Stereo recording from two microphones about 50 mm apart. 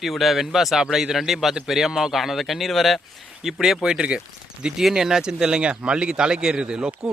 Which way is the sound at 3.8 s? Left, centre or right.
Centre.